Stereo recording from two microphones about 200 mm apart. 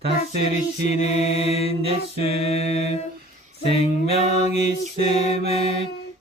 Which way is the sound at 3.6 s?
30° left (ahead or behind).